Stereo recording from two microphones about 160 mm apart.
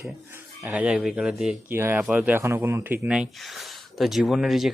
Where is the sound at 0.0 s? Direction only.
15° right (ahead or behind).